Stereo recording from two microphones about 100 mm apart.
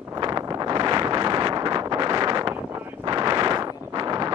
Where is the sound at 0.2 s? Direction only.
40° right (ahead or behind).